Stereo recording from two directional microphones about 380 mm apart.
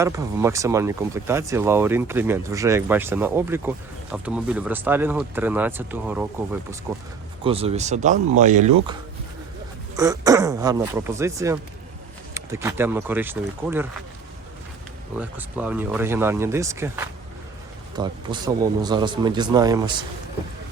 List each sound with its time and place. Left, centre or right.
0.0 s speech: centre
7.4 s speech: centre
10.0 s speech: centre
15.2 s speech: centre